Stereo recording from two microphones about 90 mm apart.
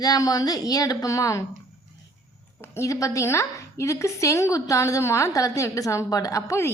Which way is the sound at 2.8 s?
35° left (ahead or behind).